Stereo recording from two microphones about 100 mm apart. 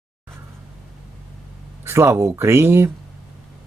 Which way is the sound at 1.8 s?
25° right (ahead or behind).